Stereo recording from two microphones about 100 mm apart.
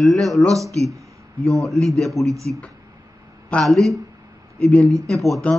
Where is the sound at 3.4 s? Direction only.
5° left (ahead or behind).